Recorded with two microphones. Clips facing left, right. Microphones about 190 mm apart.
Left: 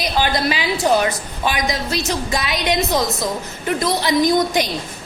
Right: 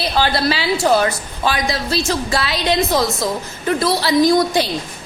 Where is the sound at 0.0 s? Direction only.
15° left (ahead or behind).